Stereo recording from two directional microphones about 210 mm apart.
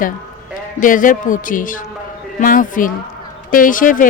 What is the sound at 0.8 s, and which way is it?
Speech, 40° left (ahead or behind).